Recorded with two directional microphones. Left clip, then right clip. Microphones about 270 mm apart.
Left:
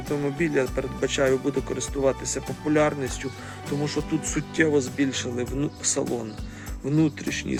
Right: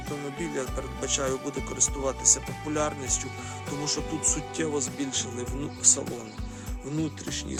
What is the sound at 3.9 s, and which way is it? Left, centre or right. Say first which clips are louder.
Speech: left 1 dB; centre.